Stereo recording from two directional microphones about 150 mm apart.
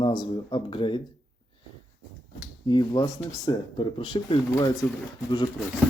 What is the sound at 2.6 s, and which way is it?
Speech, 30° left (ahead or behind).